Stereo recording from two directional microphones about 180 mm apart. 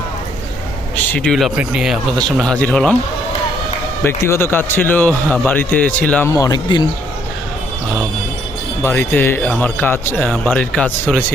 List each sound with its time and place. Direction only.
0.9 s speech: 10° left (ahead or behind)
4.0 s a man's voice: 15° left (ahead or behind)
6.3 s speech: 20° left (ahead or behind)
8.8 s a man's voice: 10° left (ahead or behind)